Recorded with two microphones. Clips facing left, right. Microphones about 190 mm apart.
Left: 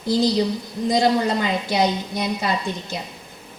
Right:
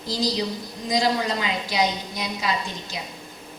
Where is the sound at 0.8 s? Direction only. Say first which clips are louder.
Left 4 dB; 55° left (ahead or behind).